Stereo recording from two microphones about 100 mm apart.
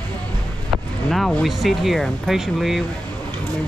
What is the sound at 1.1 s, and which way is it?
Speech, centre (ahead or behind).